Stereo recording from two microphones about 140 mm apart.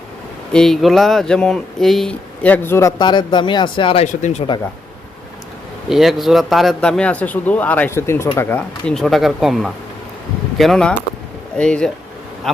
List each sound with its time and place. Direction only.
0.5 s speech: 5° left (ahead or behind); by 2.9 s 20° left (ahead or behind)
3.0 s speech: 35° left (ahead or behind)
4.0 s speech: 60° left (ahead or behind)
5.9 s a man's voice: centre (ahead or behind); by 8.6 s 15° left (ahead or behind)
8.9 s a man's voice: centre (ahead or behind)